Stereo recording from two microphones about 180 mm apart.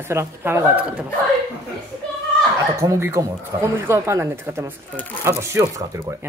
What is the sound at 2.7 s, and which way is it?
Speech, 15° right (ahead or behind).